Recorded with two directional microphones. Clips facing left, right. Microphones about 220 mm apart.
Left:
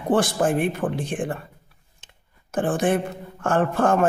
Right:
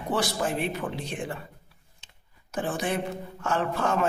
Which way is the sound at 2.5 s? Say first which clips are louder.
Left 7 dB; 50° left (ahead or behind).